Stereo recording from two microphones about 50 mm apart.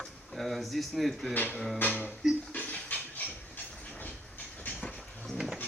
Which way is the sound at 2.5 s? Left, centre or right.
Left.